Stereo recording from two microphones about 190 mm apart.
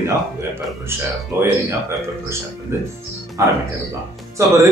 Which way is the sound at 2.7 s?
15° right (ahead or behind).